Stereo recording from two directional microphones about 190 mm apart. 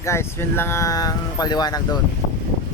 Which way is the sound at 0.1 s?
15° left (ahead or behind).